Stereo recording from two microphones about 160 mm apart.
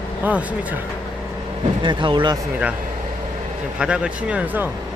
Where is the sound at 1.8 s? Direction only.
30° right (ahead or behind).